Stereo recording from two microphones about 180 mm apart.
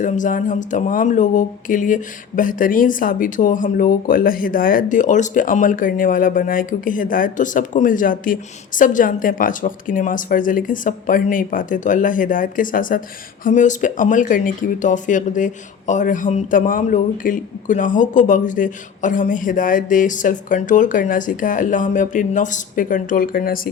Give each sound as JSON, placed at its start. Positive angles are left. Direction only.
{"t": 0.0, "sound": "speech", "side_deg": 45}